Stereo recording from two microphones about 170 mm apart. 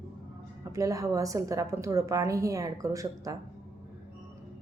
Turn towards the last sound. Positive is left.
turn(degrees=-20)  # may be behind; listen again after turning